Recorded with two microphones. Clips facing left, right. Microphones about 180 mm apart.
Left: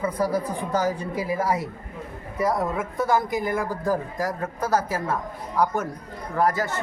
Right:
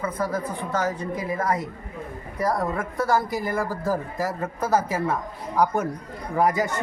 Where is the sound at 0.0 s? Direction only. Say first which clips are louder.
Left 3 dB; 10° left (ahead or behind); by 6.7 s 15° right (ahead or behind).